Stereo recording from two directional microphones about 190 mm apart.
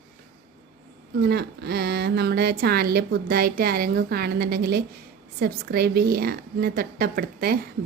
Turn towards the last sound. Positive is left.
turn(degrees=-55)  # may be behind; listen again after turning